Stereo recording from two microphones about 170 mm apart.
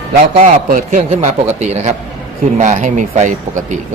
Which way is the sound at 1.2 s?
40° right (ahead or behind).